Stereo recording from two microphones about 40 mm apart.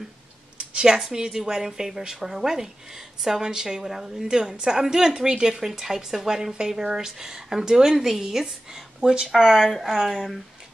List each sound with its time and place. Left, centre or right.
0.7 s a woman's voice: centre
5.5 s a woman's voice: centre
10.0 s speech: centre